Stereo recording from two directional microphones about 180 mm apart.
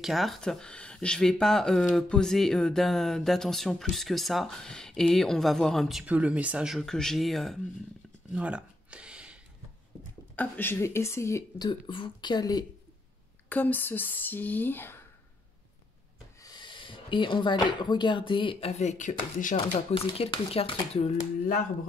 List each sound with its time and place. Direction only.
0.0 s speech: centre (ahead or behind)
8.3 s a sound: 5° right (ahead or behind)
10.3 s speech: 10° left (ahead or behind)
13.5 s speech: 10° left (ahead or behind)
16.4 s speech: 25° left (ahead or behind); by 19.6 s 45° left (ahead or behind)
19.9 s speech: 30° left (ahead or behind)